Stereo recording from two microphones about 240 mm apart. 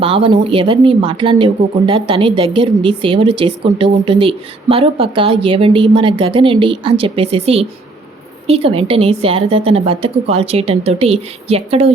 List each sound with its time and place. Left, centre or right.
0.0 s a woman's voice: right